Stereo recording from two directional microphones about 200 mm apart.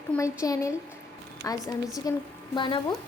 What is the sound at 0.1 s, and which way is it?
A woman's voice, 15° left (ahead or behind).